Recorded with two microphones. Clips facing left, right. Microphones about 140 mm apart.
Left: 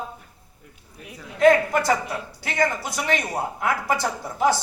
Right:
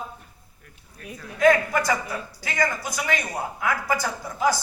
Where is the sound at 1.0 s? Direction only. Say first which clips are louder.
Right 2 dB; 10° left (ahead or behind).